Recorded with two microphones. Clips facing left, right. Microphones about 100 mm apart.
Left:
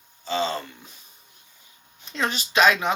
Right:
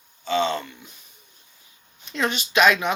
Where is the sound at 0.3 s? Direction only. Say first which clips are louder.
Right 3 dB; 30° left (ahead or behind).